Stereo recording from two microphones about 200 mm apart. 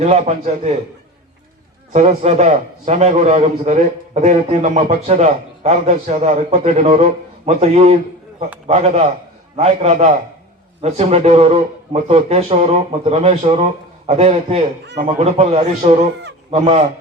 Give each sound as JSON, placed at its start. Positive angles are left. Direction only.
{"t": 0.0, "sound": "a man's voice", "side_deg": -35}
{"t": 1.9, "sound": "a man's voice", "side_deg": -35}